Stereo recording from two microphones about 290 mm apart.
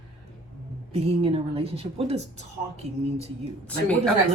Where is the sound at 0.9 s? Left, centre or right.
Centre.